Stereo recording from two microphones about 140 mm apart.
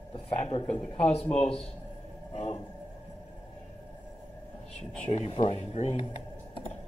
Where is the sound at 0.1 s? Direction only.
45° left (ahead or behind).